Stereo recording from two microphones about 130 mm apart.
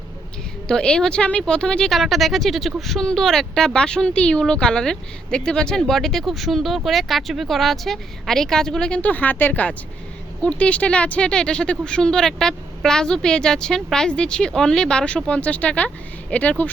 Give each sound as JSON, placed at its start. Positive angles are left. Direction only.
{"t": 0.7, "sound": "speech", "side_deg": 5}